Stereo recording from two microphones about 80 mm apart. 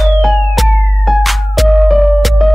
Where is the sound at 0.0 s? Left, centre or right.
Centre.